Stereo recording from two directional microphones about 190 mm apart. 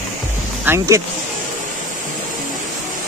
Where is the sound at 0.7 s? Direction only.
15° right (ahead or behind).